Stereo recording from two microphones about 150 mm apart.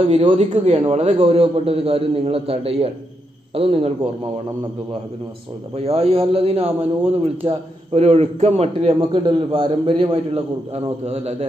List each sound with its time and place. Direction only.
0.1 s a man's voice: 45° right (ahead or behind)
5.8 s a man's voice: 40° right (ahead or behind)
9.2 s a man's voice: 30° right (ahead or behind)